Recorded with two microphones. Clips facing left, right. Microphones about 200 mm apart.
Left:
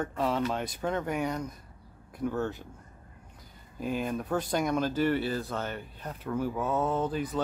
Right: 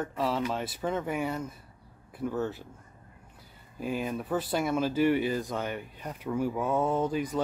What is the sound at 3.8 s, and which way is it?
Speech, 5° right (ahead or behind).